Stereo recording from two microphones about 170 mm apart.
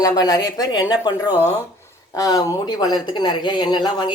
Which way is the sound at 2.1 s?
20° left (ahead or behind).